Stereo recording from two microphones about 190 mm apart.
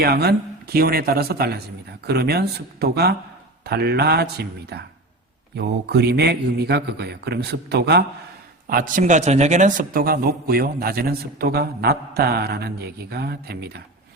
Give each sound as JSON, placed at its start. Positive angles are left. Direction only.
{"t": 0.0, "sound": "a man's voice", "side_deg": -55}
{"t": 8.6, "sound": "speech", "side_deg": -50}